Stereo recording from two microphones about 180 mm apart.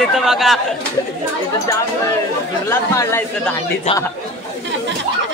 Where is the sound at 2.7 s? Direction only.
15° left (ahead or behind).